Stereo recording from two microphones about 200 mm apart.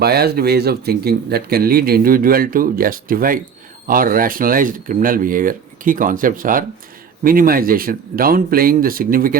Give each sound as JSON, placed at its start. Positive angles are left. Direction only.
{"t": 0.0, "sound": "speech", "side_deg": -50}